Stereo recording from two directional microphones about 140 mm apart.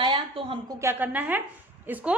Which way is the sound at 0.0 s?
35° right (ahead or behind).